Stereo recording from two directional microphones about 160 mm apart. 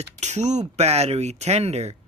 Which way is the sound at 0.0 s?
45° right (ahead or behind).